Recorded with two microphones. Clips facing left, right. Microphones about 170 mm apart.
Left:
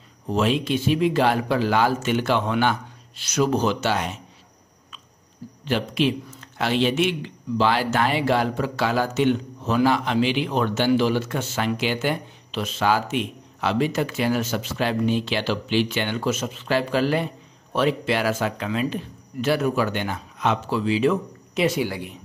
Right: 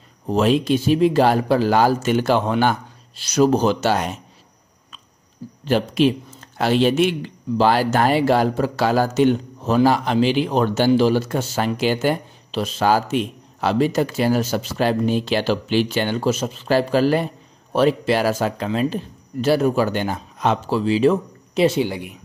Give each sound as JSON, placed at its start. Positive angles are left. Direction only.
{"t": 0.3, "sound": "speech", "side_deg": -40}
{"t": 5.7, "sound": "speech", "side_deg": -40}